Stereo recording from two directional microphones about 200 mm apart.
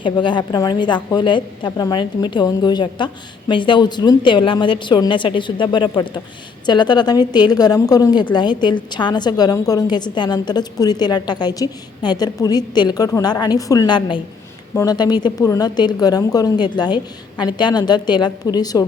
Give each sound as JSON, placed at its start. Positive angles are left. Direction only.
{"t": 0.0, "sound": "a woman's voice", "side_deg": 25}